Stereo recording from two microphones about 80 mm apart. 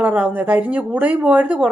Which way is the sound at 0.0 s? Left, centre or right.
Centre.